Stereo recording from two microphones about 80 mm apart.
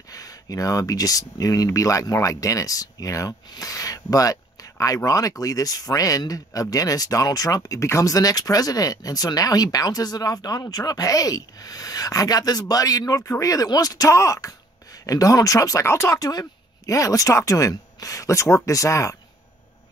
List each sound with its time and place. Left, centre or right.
0.1 s speech: left